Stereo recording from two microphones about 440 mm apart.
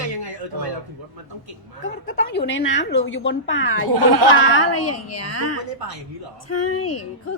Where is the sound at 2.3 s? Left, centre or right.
Left.